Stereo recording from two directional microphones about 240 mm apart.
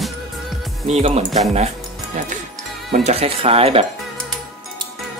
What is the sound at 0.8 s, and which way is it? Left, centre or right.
Speech, right.